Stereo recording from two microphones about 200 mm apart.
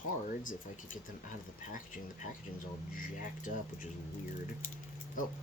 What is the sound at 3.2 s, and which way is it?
Speech, 40° left (ahead or behind).